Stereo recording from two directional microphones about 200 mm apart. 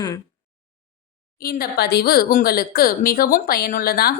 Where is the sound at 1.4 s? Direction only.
50° left (ahead or behind).